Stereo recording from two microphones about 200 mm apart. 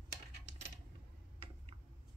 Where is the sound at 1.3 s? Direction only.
30° right (ahead or behind).